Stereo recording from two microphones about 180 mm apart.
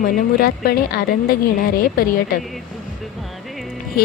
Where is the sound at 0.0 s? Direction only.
55° left (ahead or behind).